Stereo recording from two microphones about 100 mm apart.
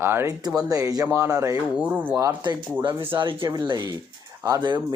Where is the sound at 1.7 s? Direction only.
15° right (ahead or behind).